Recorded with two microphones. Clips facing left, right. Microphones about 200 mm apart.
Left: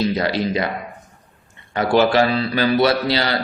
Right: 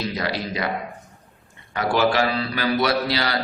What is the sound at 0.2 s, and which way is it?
Speech, 25° left (ahead or behind).